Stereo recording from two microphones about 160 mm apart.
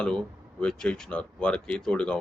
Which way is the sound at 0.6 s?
5° left (ahead or behind).